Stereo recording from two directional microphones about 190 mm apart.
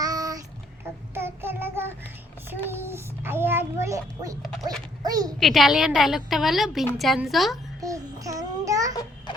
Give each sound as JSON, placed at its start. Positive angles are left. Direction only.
{"t": 0.0, "sound": "child singing", "side_deg": -20}
{"t": 2.6, "sound": "a child's voice", "side_deg": -10}
{"t": 5.4, "sound": "a woman's voice", "side_deg": 0}
{"t": 7.8, "sound": "babbling", "side_deg": -15}